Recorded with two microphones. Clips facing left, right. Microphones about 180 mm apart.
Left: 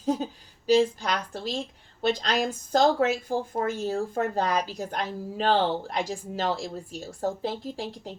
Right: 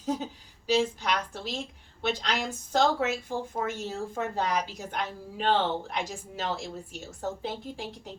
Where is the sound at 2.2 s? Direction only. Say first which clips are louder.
Left 5 dB; 35° left (ahead or behind).